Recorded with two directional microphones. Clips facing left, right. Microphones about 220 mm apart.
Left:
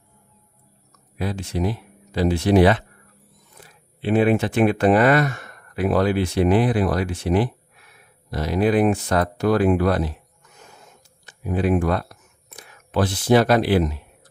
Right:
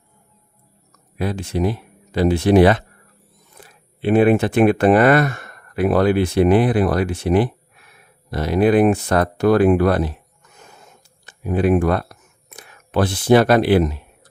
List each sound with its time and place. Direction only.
1.2 s speech: 60° right (ahead or behind)
11.3 s speech: 60° right (ahead or behind)